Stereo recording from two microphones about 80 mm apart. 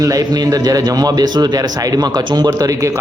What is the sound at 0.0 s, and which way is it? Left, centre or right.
Speech, right.